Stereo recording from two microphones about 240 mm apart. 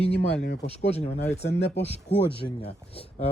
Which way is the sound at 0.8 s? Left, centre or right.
Left.